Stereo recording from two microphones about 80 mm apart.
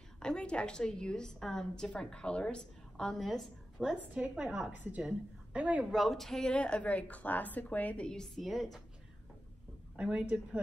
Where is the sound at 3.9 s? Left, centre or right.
Centre.